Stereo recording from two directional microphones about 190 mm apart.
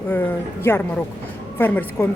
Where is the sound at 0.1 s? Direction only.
10° left (ahead or behind).